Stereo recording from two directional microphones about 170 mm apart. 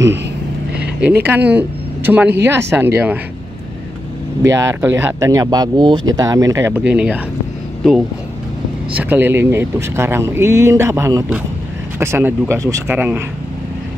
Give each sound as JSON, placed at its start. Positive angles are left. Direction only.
{"t": 1.2, "sound": "speech", "side_deg": -10}
{"t": 4.4, "sound": "speech", "side_deg": -15}
{"t": 8.9, "sound": "speech", "side_deg": -10}